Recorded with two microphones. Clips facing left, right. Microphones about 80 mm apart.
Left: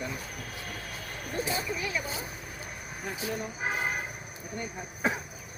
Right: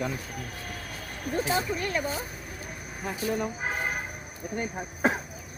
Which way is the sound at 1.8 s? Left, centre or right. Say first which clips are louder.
Right 4 dB; right.